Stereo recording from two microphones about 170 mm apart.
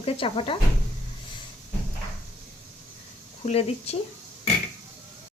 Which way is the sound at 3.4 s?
40° left (ahead or behind).